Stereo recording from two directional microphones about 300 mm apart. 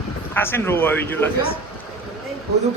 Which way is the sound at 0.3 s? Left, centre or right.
Centre.